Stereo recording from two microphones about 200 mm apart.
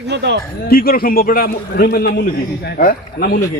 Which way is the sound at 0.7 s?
45° left (ahead or behind).